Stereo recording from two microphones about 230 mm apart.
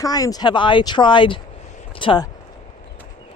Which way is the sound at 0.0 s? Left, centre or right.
Centre.